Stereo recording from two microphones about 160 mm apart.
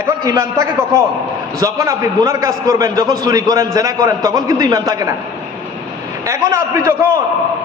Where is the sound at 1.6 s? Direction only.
20° right (ahead or behind).